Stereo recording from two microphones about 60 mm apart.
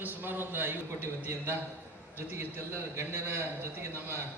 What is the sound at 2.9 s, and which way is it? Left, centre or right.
A man's voice, right.